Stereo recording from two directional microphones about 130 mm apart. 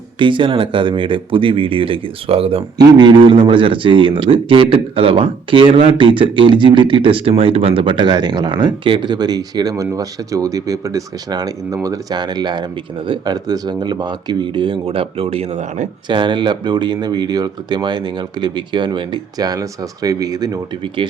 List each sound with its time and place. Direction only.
0.2 s speech: 40° right (ahead or behind)
2.7 s a man's voice: 35° right (ahead or behind); by 15.9 s 60° right (ahead or behind)
16.0 s a man's voice: 40° right (ahead or behind)